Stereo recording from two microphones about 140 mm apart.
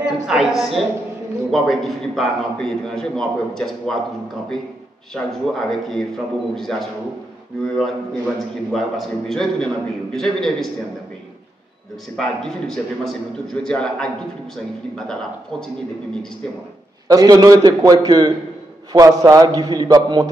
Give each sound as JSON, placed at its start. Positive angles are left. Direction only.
{"t": 0.0, "sound": "a man's voice", "side_deg": -5}
{"t": 5.1, "sound": "a man's voice", "side_deg": 0}
{"t": 8.7, "sound": "a man's voice", "side_deg": 0}
{"t": 12.2, "sound": "a man's voice", "side_deg": 5}
{"t": 17.1, "sound": "a man's voice", "side_deg": -25}